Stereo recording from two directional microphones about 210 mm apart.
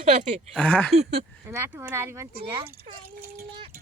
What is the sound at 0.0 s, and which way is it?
Speech, 35° right (ahead or behind).